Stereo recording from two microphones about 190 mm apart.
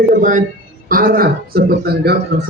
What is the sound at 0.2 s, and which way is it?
Speech, 45° right (ahead or behind).